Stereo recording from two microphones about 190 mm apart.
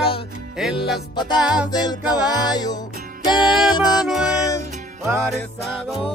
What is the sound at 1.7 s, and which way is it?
Music, 20° left (ahead or behind).